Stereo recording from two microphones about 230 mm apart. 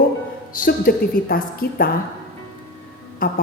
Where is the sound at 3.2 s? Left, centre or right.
Left.